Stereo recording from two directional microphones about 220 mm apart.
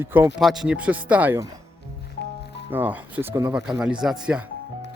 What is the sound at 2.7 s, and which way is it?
Speech, 10° right (ahead or behind).